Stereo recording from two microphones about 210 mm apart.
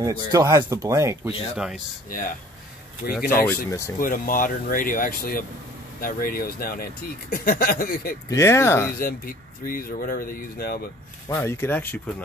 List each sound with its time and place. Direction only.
0.0 s speech: 15° right (ahead or behind)
2.0 s speech: 40° left (ahead or behind)
3.4 s speech: 15° left (ahead or behind)
4.0 s speech: 40° left (ahead or behind)
8.3 s speech: 15° left (ahead or behind)
8.9 s speech: 45° left (ahead or behind)
11.2 s speech: 10° left (ahead or behind)